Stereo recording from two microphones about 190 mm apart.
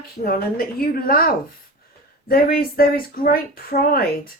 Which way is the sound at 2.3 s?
50° left (ahead or behind).